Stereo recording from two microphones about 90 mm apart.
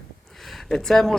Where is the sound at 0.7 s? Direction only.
5° left (ahead or behind).